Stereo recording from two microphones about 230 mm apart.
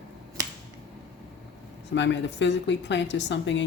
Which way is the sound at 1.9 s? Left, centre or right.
Left.